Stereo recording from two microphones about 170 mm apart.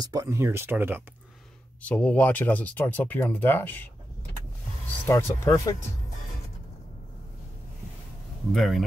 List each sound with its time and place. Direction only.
0.0 s speech: 20° right (ahead or behind)
1.8 s speech: 10° left (ahead or behind)
5.0 s speech: 15° left (ahead or behind)
8.5 s speech: centre (ahead or behind)